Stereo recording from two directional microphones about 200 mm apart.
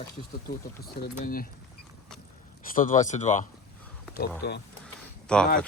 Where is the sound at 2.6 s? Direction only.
40° left (ahead or behind).